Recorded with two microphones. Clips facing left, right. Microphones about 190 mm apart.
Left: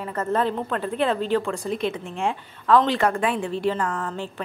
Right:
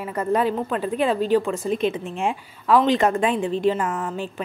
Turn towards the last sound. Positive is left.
turn(degrees=-15)  # may be behind; listen again after turning